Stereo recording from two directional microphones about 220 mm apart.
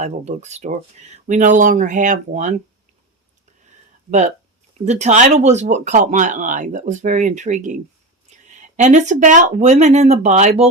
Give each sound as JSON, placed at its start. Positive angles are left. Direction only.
{"t": 0.0, "sound": "speech", "side_deg": -30}
{"t": 4.9, "sound": "speech", "side_deg": -30}